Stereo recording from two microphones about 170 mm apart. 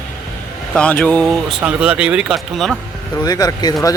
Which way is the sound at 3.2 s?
20° left (ahead or behind).